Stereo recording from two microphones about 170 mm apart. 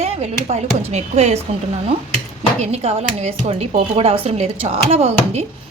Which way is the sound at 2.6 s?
40° right (ahead or behind).